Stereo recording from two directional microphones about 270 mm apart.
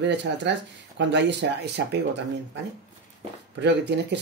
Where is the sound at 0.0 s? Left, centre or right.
Right.